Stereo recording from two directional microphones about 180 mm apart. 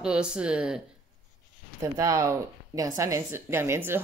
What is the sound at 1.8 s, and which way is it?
A woman's voice, 15° right (ahead or behind).